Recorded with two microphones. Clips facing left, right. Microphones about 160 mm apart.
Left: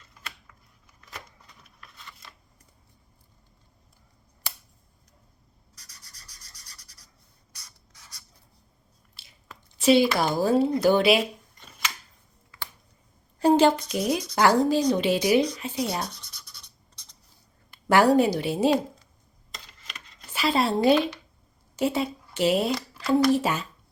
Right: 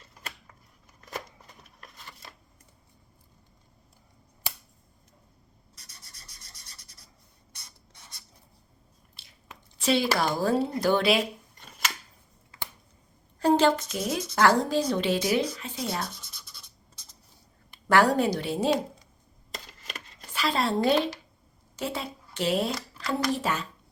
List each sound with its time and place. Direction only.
0.1 s a sound: 45° right (ahead or behind)
1.0 s shuffling cards: 45° right (ahead or behind)
5.7 s rub: 25° right (ahead or behind)
9.2 s biting: 5° left (ahead or behind)
9.7 s speech: 5° left (ahead or behind)
13.4 s a woman's voice: 10° left (ahead or behind)
16.1 s scratch: centre (ahead or behind)
17.8 s speech: 10° left (ahead or behind)
20.3 s speech: 10° left (ahead or behind)